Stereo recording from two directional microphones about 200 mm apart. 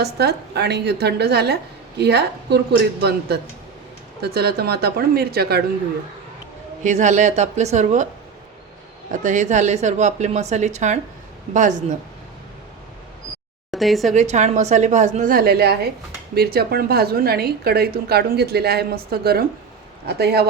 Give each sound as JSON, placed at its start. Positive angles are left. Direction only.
{"t": 0.0, "sound": "a woman's voice", "side_deg": -55}
{"t": 6.8, "sound": "a woman's voice", "side_deg": -35}
{"t": 9.2, "sound": "a woman's voice", "side_deg": -40}
{"t": 13.7, "sound": "speech", "side_deg": 0}
{"t": 14.1, "sound": "a woman's voice", "side_deg": -35}